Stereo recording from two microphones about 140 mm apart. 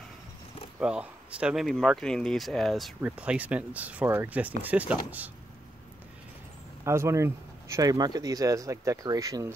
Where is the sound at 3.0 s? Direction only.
10° right (ahead or behind).